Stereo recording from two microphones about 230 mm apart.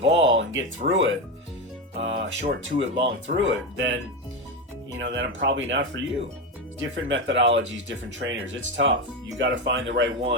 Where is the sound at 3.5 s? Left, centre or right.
Right.